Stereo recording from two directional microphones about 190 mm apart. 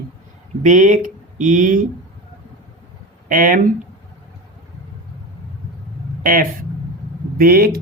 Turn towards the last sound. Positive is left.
turn(degrees=-50)  # may be behind; listen again after turning